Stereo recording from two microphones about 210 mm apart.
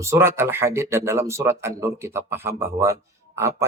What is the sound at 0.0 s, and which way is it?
Speech, 15° right (ahead or behind).